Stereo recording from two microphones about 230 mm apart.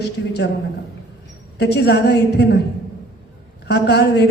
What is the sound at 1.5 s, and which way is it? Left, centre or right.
A man's voice, left.